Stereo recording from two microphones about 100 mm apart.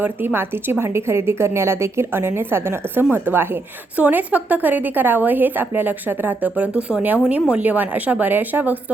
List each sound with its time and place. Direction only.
0.0 s a woman's voice: 20° right (ahead or behind)